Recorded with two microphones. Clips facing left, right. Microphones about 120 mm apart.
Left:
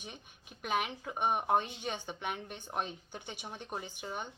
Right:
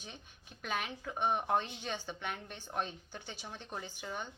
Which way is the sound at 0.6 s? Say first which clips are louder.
Left 4 dB; 15° left (ahead or behind).